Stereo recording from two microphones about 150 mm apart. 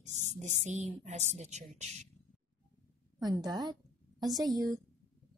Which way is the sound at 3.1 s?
25° right (ahead or behind).